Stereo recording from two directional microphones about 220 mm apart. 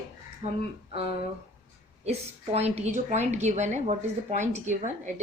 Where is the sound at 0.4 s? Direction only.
30° right (ahead or behind).